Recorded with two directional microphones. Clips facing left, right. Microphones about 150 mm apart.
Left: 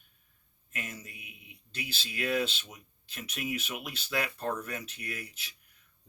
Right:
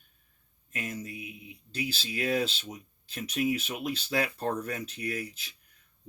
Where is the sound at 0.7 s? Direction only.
35° right (ahead or behind).